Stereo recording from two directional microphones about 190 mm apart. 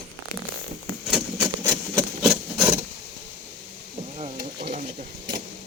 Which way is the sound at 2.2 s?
Centre (ahead or behind).